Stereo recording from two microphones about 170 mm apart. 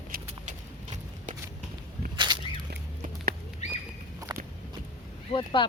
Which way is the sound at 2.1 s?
25° right (ahead or behind).